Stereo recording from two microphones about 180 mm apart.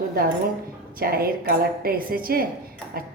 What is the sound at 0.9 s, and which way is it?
A woman's voice, 55° right (ahead or behind).